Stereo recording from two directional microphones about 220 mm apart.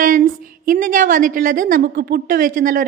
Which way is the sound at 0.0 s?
40° right (ahead or behind).